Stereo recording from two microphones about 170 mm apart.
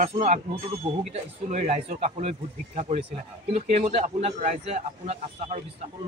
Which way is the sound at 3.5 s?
40° right (ahead or behind).